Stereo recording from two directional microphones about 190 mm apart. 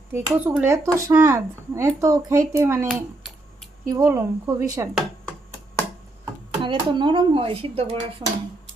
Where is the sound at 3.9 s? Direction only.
15° right (ahead or behind).